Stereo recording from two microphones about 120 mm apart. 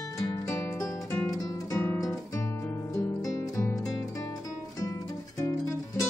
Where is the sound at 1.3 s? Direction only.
20° left (ahead or behind).